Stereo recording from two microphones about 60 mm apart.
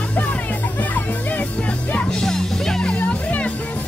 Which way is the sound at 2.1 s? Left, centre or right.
Centre.